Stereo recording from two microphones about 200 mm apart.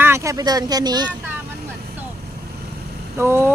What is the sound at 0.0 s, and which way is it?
Speech, 15° right (ahead or behind).